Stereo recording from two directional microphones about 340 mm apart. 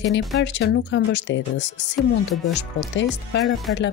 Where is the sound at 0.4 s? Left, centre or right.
Left.